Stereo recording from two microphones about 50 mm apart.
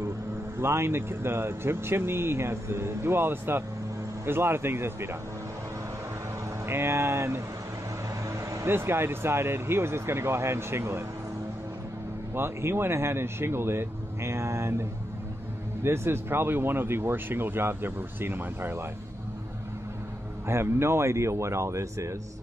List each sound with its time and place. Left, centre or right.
0.6 s speech: right
6.6 s speech: right
8.3 s vehicle: right
8.6 s speech: right
12.4 s speech: right
20.4 s speech: right